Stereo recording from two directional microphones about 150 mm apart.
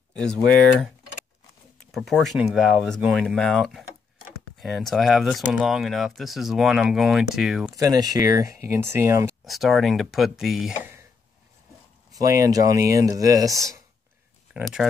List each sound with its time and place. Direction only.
0.1 s speech: 5° left (ahead or behind)
1.9 s speech: centre (ahead or behind)
7.7 s speech: 25° right (ahead or behind)
9.4 s speech: centre (ahead or behind)
12.1 s speech: 25° right (ahead or behind)
14.5 s speech: centre (ahead or behind)